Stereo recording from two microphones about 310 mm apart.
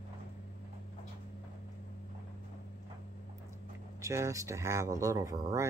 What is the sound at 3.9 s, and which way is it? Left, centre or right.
Speech, centre.